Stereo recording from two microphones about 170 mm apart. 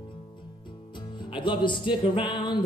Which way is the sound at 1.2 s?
30° left (ahead or behind).